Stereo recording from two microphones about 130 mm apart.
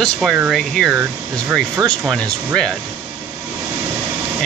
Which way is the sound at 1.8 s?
25° right (ahead or behind).